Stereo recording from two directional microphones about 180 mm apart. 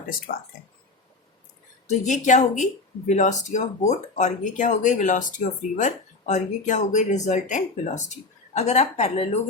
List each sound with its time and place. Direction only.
0.3 s speech: 55° left (ahead or behind)
1.9 s speech: 40° left (ahead or behind)